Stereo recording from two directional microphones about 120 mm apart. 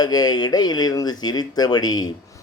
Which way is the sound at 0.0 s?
35° left (ahead or behind).